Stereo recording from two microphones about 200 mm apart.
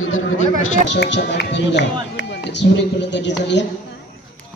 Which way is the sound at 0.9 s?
60° left (ahead or behind).